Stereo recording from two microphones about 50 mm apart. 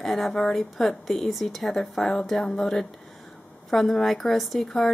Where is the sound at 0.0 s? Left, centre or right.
Centre.